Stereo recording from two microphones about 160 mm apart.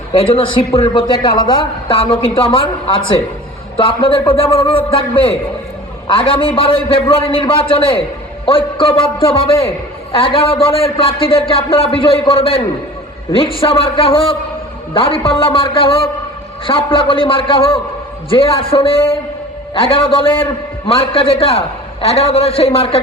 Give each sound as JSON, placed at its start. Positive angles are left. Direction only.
{"t": 0.1, "sound": "a man's voice", "side_deg": 35}